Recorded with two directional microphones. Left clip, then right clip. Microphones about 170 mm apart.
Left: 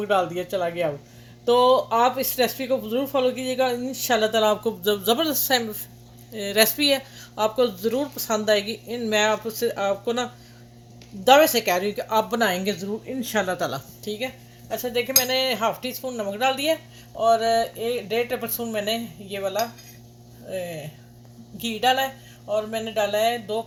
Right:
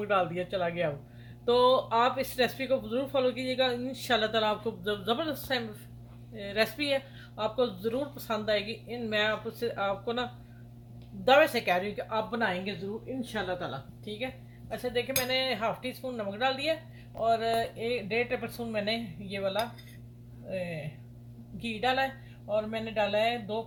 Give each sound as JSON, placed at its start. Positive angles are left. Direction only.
{"t": 0.1, "sound": "speech", "side_deg": 35}
{"t": 11.3, "sound": "speech", "side_deg": 40}
{"t": 13.3, "sound": "speech", "side_deg": 80}
{"t": 14.0, "sound": "speech", "side_deg": 45}
{"t": 21.6, "sound": "speech", "side_deg": 40}
{"t": 23.1, "sound": "speech", "side_deg": 40}